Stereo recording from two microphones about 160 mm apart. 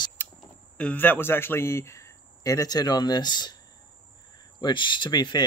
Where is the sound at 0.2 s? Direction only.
10° left (ahead or behind).